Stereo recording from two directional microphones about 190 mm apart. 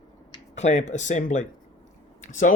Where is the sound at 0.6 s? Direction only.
35° left (ahead or behind).